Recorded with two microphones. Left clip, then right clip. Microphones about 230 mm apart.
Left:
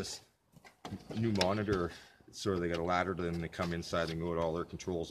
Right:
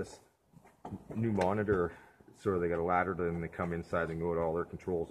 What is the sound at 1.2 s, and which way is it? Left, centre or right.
Speech, left.